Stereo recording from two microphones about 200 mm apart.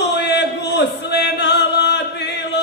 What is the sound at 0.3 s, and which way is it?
Music, 60° left (ahead or behind).